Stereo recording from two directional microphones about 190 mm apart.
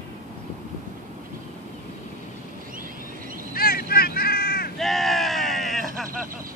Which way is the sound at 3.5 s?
50° left (ahead or behind).